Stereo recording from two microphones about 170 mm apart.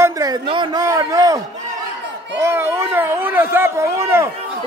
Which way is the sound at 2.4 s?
15° right (ahead or behind).